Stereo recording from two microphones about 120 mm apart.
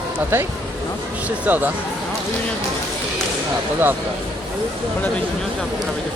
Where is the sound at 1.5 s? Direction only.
15° right (ahead or behind).